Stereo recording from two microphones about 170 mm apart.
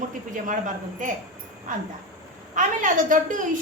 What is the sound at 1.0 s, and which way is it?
Speech, 50° right (ahead or behind).